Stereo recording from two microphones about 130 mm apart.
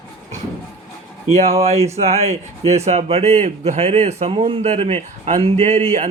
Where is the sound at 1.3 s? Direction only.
55° right (ahead or behind).